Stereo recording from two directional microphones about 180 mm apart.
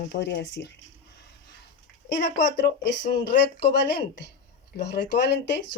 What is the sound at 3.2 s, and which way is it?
Speech, 70° left (ahead or behind).